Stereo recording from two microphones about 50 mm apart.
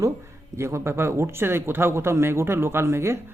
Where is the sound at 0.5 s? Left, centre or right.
Right.